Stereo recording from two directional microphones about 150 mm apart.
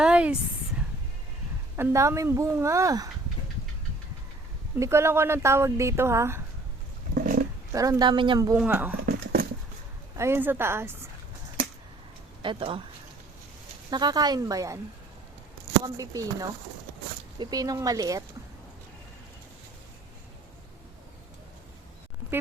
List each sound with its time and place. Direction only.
0.0 s a sound: 5° right (ahead or behind)
1.7 s speech: 20° right (ahead or behind)
4.8 s speech: 15° right (ahead or behind)
7.1 s roaring cats: 60° right (ahead or behind)
7.7 s speech: 20° right (ahead or behind)
8.5 s speech: 10° right (ahead or behind)
9.0 s a sound: 90° right
10.2 s speech: 15° right (ahead or behind)
12.4 s speech: 35° right (ahead or behind)
13.9 s speech: 25° right (ahead or behind)
16.0 s speech: 25° right (ahead or behind)